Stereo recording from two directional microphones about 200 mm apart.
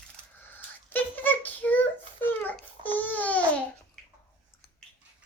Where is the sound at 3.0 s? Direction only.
10° left (ahead or behind).